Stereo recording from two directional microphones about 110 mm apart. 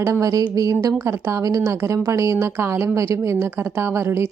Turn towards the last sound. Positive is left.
turn(degrees=-25)  # may be behind; listen again after turning